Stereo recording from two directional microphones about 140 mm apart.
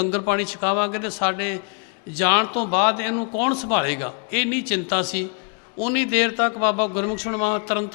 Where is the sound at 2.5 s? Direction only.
25° left (ahead or behind).